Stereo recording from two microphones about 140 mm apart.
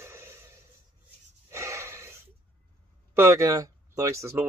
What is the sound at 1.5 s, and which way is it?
Snort, 20° right (ahead or behind).